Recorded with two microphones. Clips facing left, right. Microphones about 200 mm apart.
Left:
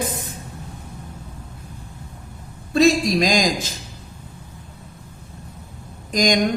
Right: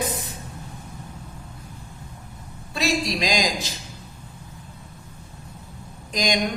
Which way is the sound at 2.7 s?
50° left (ahead or behind).